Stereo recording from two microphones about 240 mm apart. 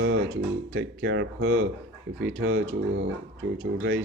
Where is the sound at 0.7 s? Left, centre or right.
Right.